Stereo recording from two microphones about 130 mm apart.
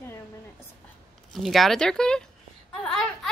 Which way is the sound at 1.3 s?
Centre (ahead or behind).